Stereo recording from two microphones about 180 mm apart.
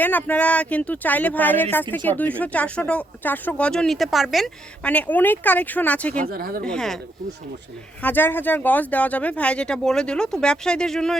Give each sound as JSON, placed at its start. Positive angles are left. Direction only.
{"t": 0.0, "sound": "speech", "side_deg": 10}
{"t": 6.3, "sound": "speech", "side_deg": -55}
{"t": 6.7, "sound": "speech", "side_deg": 5}
{"t": 8.0, "sound": "speech", "side_deg": 10}